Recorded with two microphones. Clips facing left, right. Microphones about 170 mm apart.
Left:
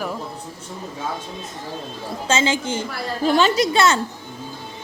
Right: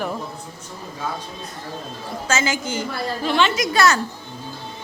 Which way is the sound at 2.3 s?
25° left (ahead or behind).